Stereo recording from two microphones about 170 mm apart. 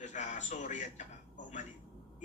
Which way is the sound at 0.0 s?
45° left (ahead or behind).